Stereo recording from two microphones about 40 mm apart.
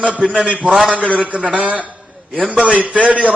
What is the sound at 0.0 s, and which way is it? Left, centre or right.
A man's voice, right.